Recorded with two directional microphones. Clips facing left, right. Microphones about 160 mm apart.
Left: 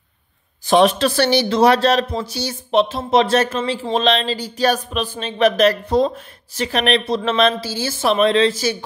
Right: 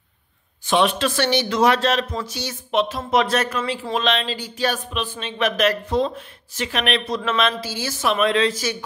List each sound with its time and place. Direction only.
0.7 s a man's voice: 40° left (ahead or behind)